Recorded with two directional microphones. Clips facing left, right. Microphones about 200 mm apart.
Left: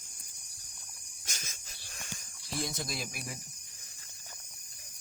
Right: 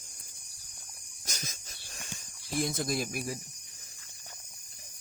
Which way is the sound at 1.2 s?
40° right (ahead or behind).